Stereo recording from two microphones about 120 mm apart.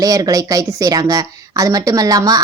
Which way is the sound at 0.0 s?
30° right (ahead or behind).